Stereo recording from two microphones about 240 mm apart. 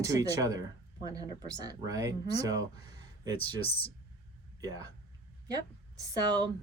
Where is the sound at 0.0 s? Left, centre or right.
Centre.